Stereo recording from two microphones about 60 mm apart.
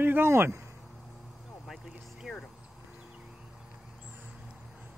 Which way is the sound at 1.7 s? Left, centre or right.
Centre.